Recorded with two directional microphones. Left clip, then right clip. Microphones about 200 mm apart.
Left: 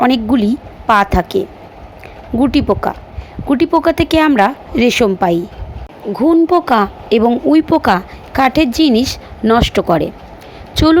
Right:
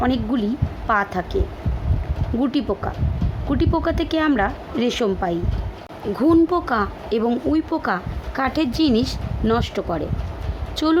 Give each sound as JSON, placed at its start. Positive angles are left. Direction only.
{"t": 0.0, "sound": "a woman's voice", "side_deg": 30}
{"t": 2.4, "sound": "a woman's voice", "side_deg": 25}